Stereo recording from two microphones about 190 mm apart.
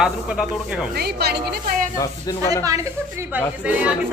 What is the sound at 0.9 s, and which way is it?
Speech, 55° right (ahead or behind).